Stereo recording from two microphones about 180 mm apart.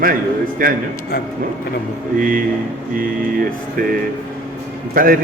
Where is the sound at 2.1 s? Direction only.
50° right (ahead or behind).